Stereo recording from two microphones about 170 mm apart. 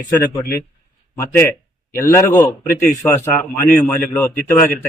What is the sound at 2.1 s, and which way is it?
A man's voice, 15° left (ahead or behind).